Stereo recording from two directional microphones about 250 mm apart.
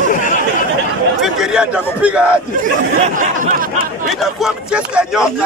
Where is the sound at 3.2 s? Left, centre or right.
Right.